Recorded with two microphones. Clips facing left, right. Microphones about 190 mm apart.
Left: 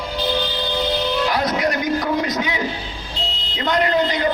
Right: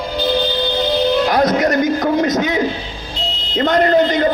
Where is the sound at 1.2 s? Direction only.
45° right (ahead or behind).